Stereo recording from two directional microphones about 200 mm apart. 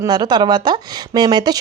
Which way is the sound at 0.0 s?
20° right (ahead or behind).